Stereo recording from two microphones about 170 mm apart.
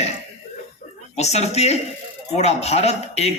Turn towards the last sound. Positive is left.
turn(degrees=40)  # may be behind; listen again after turning